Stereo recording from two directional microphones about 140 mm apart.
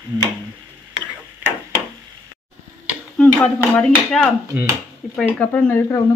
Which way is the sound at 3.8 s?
5° left (ahead or behind).